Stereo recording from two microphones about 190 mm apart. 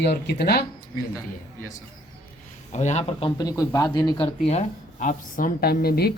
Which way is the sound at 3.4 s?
20° left (ahead or behind).